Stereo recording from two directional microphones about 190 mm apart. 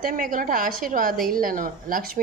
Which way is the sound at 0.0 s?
45° right (ahead or behind).